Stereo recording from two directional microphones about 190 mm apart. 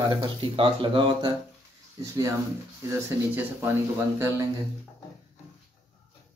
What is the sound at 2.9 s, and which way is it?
Speech, 10° right (ahead or behind).